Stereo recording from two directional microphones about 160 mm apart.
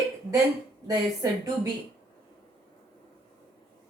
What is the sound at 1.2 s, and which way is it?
Speech, 20° right (ahead or behind).